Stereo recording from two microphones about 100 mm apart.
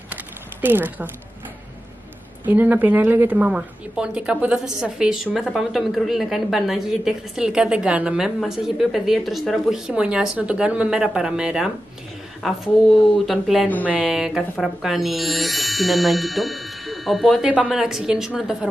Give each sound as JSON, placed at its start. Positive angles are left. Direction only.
{"t": 0.1, "sound": "a sound", "side_deg": -20}
{"t": 2.4, "sound": "a woman's voice", "side_deg": -15}
{"t": 13.8, "sound": "a woman's voice", "side_deg": -15}